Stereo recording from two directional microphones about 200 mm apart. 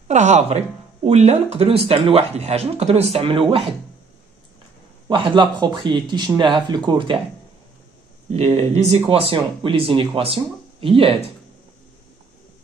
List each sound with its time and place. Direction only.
0.1 s speech: 35° right (ahead or behind)
5.1 s speech: 25° right (ahead or behind)
8.3 s speech: 35° right (ahead or behind)